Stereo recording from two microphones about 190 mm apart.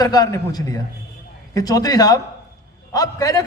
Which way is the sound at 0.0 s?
20° left (ahead or behind).